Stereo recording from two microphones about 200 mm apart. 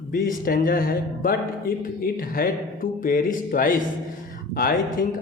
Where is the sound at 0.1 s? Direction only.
45° left (ahead or behind).